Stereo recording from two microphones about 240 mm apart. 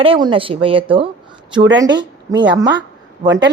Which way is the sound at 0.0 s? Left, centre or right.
Right.